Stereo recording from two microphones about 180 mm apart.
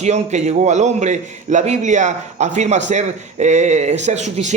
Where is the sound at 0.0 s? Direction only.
40° right (ahead or behind).